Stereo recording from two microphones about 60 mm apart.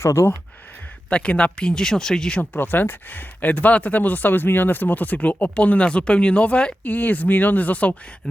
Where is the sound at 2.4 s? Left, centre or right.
Left.